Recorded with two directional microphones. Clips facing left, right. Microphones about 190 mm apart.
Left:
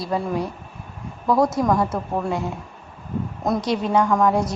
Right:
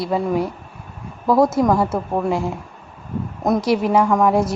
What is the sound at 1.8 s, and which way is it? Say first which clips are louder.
Speech: right 3 dB; 25° right (ahead or behind).